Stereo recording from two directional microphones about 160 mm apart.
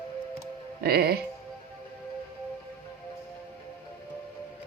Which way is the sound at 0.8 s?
85° right.